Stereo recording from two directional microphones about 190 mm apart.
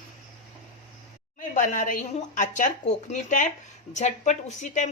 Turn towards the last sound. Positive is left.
turn(degrees=40)  # may be behind; listen again after turning